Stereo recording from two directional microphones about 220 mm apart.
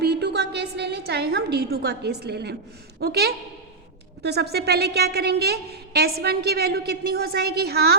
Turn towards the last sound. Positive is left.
turn(degrees=-45)  # may be behind; listen again after turning